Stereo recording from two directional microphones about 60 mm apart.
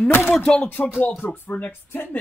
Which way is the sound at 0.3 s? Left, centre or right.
Centre.